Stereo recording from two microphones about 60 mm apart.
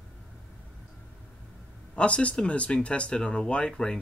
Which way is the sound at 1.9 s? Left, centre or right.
Left.